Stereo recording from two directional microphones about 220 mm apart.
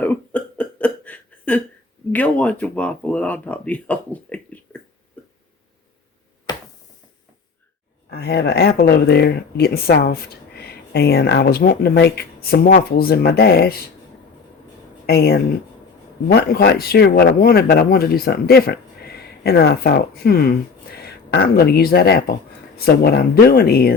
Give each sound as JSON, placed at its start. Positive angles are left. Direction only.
{"t": 0.0, "sound": "cough", "side_deg": 5}
{"t": 2.1, "sound": "speech", "side_deg": 5}
{"t": 8.1, "sound": "speech", "side_deg": 45}
{"t": 15.0, "sound": "speech", "side_deg": 45}